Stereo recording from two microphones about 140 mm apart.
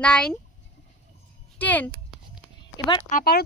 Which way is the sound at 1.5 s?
10° left (ahead or behind).